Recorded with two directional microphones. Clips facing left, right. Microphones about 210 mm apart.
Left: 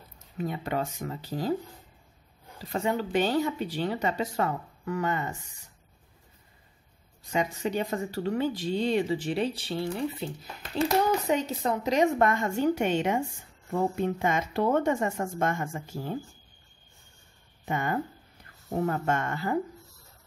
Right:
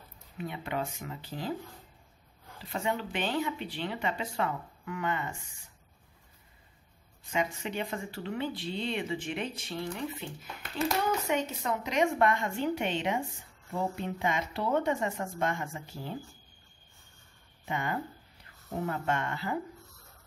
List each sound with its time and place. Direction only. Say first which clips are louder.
0.4 s speech: left 4 dB; 40° left (ahead or behind)
2.6 s speech: left 4 dB; 40° left (ahead or behind)
7.2 s speech: left 4 dB; 40° left (ahead or behind)
17.6 s speech: left 4 dB; 45° left (ahead or behind)